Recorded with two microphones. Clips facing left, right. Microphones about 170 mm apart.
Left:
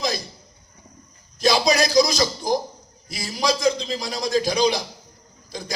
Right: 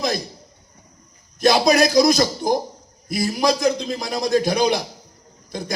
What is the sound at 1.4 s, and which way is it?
A man's voice, 55° right (ahead or behind).